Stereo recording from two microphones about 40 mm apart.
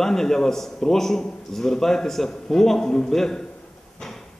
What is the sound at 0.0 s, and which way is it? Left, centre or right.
Speech, centre.